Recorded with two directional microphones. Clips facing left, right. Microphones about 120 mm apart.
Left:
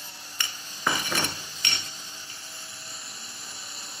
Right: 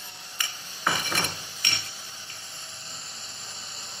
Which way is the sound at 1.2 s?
15° right (ahead or behind).